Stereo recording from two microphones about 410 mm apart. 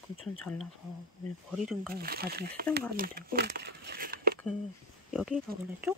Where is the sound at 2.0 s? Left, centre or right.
Right.